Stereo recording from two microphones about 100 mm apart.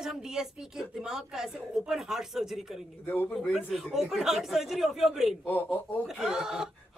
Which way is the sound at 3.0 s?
20° left (ahead or behind).